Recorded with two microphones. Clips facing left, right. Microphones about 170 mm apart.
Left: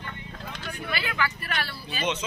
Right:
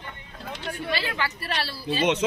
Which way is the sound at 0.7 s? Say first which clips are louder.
Right 4 dB; 30° right (ahead or behind).